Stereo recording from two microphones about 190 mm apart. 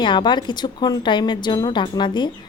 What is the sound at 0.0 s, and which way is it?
Speech, 25° left (ahead or behind).